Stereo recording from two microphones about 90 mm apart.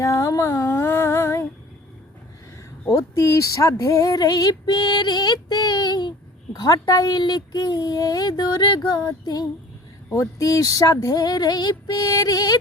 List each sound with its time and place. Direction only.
0.0 s female singing: 35° left (ahead or behind)
2.8 s speech: 35° left (ahead or behind)
10.1 s speech: 35° left (ahead or behind)